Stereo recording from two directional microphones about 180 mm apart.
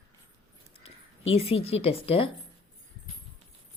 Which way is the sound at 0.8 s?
35° left (ahead or behind).